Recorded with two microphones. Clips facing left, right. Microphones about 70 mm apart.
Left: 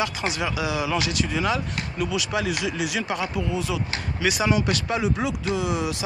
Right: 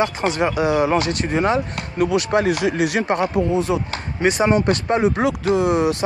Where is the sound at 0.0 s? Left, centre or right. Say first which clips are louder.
Right 7 dB; right.